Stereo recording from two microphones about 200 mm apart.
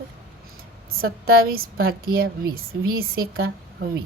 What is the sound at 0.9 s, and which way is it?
A woman's voice, 50° right (ahead or behind).